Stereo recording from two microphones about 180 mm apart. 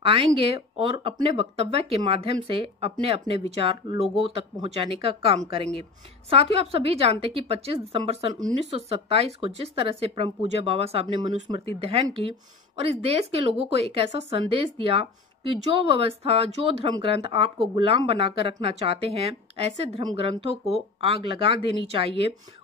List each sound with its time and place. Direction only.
0.0 s speech: 30° right (ahead or behind)